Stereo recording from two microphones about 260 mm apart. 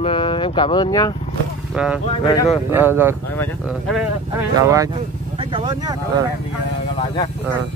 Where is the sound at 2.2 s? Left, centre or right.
Centre.